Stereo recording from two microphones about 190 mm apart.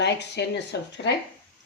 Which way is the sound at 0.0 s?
65° left (ahead or behind).